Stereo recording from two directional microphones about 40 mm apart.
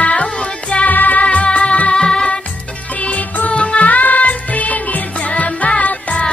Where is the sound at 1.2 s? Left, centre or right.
Left.